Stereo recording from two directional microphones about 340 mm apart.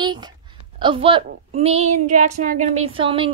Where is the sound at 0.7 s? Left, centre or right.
Centre.